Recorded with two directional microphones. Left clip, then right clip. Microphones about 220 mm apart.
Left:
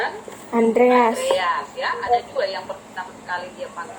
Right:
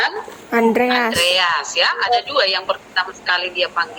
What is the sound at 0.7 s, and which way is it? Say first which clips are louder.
A woman's voice: left 1 dB; 40° right (ahead or behind).